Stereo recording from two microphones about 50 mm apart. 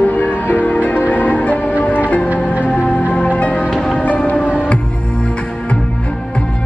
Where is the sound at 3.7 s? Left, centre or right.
Centre.